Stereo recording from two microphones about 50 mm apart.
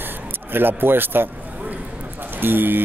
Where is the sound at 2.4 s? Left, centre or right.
Right.